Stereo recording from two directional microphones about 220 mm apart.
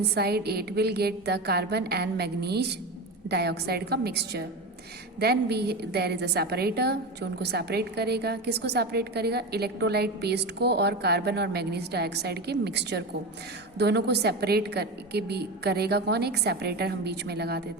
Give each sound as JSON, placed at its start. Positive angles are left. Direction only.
{"t": 0.0, "sound": "a woman's voice", "side_deg": -45}